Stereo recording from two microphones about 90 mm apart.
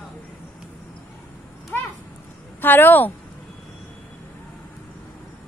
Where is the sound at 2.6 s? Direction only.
20° left (ahead or behind).